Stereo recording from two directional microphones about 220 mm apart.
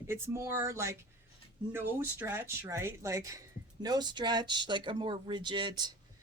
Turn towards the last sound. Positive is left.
turn(degrees=-20)  # may be behind; listen again after turning